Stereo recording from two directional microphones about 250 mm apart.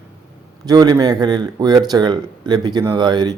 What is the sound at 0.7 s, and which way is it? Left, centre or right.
Speech, centre.